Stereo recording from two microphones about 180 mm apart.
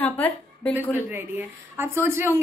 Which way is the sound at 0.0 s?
10° left (ahead or behind).